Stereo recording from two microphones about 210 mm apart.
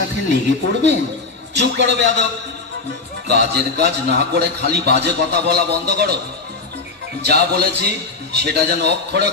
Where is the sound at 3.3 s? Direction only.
55° right (ahead or behind).